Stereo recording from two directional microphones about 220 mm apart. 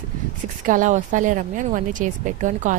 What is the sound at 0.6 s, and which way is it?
Speech, 35° right (ahead or behind).